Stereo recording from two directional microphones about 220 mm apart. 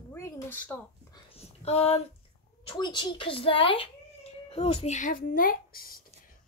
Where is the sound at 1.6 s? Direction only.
30° left (ahead or behind).